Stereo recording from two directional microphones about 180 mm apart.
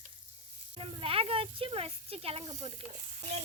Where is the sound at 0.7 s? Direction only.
30° right (ahead or behind).